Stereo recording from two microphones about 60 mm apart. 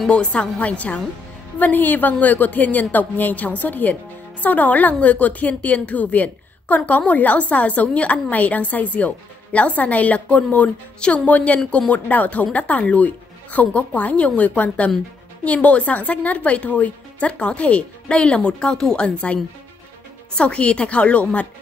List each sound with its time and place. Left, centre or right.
0.1 s a woman's voice: left